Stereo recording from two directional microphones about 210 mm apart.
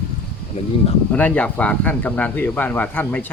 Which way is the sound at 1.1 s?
5° left (ahead or behind).